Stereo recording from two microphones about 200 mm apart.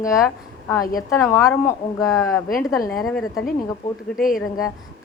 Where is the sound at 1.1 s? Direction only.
15° left (ahead or behind).